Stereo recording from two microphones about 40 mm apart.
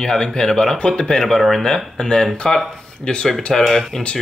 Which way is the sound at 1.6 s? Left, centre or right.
Centre.